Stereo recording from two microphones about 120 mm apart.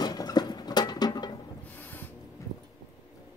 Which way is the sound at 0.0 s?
35° left (ahead or behind).